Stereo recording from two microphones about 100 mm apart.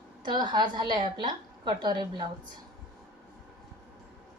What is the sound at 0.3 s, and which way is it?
A woman's voice, 50° right (ahead or behind).